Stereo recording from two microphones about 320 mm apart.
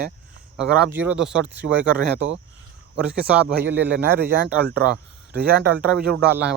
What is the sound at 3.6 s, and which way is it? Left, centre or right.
A man's voice, right.